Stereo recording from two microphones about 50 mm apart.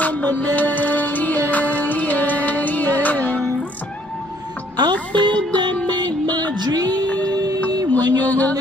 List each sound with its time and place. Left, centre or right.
0.0 s music: left
4.9 s music: left